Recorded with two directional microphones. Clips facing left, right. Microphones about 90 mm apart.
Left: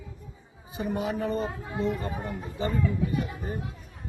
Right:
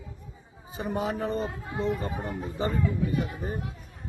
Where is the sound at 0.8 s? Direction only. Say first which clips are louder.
Even; 35° right (ahead or behind).